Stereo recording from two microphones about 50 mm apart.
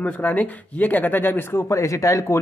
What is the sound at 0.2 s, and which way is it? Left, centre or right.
Speech, left.